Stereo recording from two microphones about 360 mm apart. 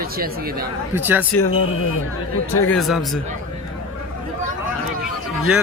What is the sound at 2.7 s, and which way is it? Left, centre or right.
Speech, centre.